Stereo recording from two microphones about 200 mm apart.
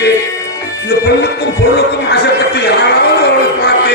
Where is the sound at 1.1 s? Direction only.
55° left (ahead or behind).